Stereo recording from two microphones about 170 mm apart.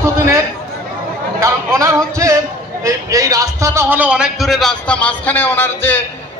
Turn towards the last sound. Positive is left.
turn(degrees=10)  # may be behind; listen again after turning